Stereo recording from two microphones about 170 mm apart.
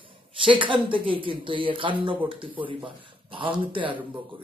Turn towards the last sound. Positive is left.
turn(degrees=-30)  # may be behind; listen again after turning